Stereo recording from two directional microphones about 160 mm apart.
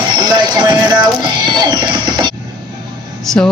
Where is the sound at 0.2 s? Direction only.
25° right (ahead or behind).